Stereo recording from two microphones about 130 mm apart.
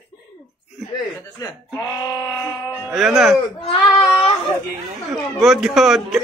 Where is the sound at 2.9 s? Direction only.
Centre (ahead or behind).